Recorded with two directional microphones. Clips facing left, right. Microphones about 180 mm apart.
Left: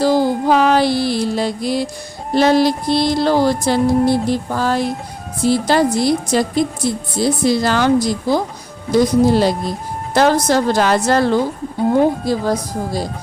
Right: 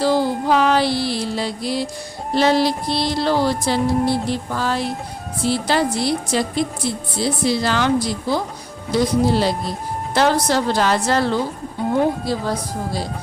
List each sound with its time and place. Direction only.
0.0 s a woman's voice: 45° left (ahead or behind)